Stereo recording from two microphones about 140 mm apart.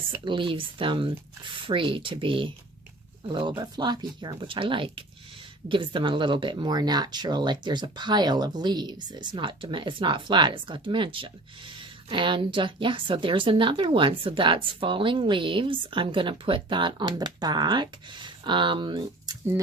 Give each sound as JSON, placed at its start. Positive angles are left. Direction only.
{"t": 0.3, "sound": "speech", "side_deg": -35}